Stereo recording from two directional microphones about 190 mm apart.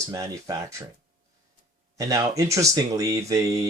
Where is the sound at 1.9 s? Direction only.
15° right (ahead or behind).